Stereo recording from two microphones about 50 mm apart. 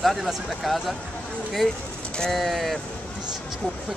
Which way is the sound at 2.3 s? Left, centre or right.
Centre.